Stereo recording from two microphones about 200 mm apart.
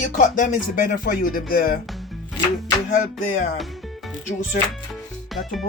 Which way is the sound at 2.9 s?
40° left (ahead or behind).